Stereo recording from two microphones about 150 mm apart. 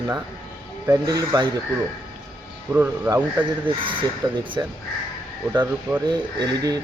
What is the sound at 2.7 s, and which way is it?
Speech, 15° right (ahead or behind).